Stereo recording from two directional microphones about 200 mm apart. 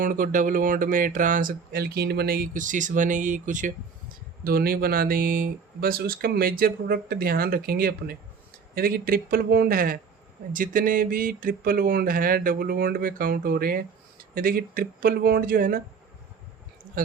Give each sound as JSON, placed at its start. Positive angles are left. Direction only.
{"t": 0.0, "sound": "speech", "side_deg": -45}